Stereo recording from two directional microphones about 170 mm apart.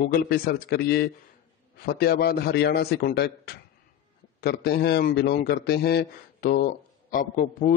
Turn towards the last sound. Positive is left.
turn(degrees=55)  # may be behind; listen again after turning